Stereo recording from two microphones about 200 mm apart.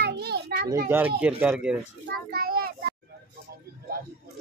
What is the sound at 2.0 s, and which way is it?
Speech, 50° right (ahead or behind).